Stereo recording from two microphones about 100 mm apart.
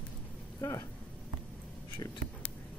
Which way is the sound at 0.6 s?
30° left (ahead or behind).